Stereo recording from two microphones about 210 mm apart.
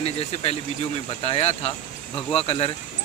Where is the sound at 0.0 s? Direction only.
30° left (ahead or behind).